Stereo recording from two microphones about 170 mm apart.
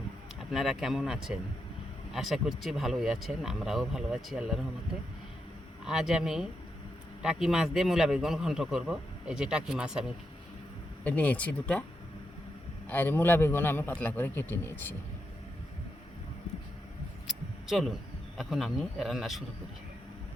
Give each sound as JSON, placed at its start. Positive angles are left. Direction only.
{"t": 0.5, "sound": "a man's voice", "side_deg": 0}
{"t": 5.8, "sound": "a man's voice", "side_deg": -5}
{"t": 11.0, "sound": "a man's voice", "side_deg": 10}
{"t": 12.9, "sound": "a man's voice", "side_deg": 10}
{"t": 17.7, "sound": "a man's voice", "side_deg": 0}